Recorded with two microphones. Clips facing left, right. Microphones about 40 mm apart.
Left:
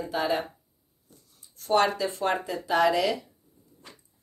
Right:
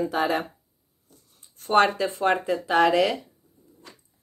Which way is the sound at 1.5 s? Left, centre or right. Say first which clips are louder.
Right 3 dB; right.